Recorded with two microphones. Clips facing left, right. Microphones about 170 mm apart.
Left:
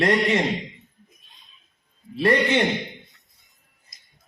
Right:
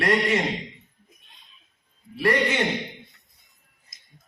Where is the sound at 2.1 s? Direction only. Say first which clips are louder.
Left 3 dB; 25° left (ahead or behind).